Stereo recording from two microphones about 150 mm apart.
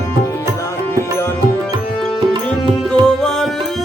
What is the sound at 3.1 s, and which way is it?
Music, 5° left (ahead or behind).